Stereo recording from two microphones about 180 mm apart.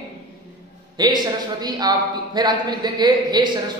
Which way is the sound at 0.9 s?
25° right (ahead or behind).